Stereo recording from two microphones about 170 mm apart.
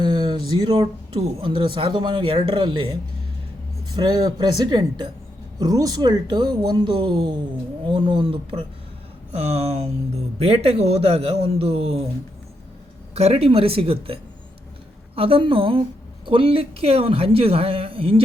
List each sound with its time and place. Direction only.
0.0 s speech: 25° right (ahead or behind)
13.1 s speech: 35° right (ahead or behind)